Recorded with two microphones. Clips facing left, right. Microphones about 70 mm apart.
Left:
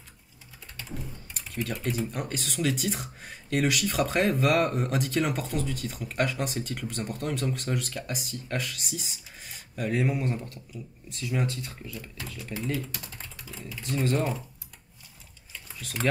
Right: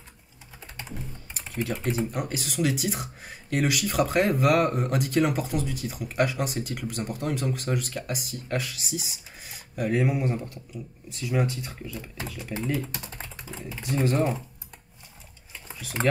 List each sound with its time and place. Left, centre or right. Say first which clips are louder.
1.5 s speech: right 3 dB; centre
11.9 s speech: right 3 dB; right
12.5 s speech: right 3 dB; centre
12.8 s typing: right 3 dB; right
14.0 s speech: right 3 dB; centre